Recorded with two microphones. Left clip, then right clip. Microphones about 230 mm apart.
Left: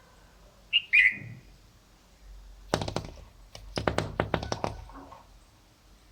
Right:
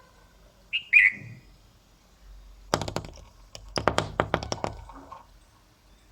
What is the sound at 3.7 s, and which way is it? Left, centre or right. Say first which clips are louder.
Tap: right 4 dB; right.